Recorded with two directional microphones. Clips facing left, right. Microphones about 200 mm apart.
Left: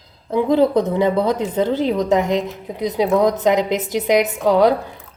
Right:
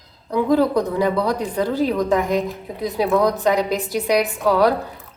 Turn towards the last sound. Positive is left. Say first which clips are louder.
# left 2 dB
turn(degrees=20)  # may be behind; listen again after turning